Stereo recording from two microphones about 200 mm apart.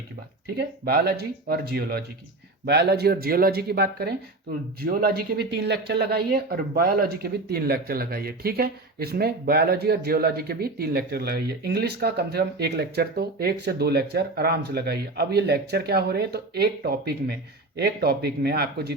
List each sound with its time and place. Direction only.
0.4 s speech: 50° right (ahead or behind)